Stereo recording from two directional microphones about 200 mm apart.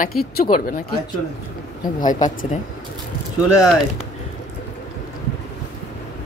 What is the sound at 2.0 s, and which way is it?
Speech, 40° left (ahead or behind).